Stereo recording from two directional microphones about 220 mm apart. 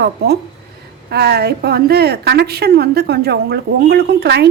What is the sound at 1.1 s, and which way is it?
A woman's voice, 45° right (ahead or behind).